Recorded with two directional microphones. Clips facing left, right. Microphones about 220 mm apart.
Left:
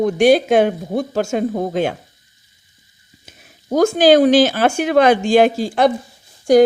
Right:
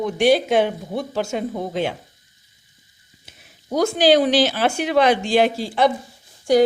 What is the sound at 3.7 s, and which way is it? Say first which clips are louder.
Speech: left 4 dB; 45° left (ahead or behind).